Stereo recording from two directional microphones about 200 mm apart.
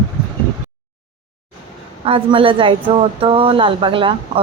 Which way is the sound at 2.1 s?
25° right (ahead or behind).